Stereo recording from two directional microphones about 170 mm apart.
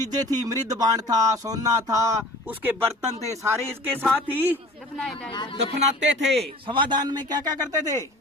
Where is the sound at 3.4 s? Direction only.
15° right (ahead or behind).